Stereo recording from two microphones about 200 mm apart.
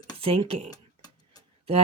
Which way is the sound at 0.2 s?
30° right (ahead or behind).